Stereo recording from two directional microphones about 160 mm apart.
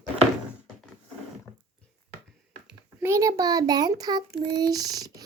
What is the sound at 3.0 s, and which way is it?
A child's voice, 20° right (ahead or behind).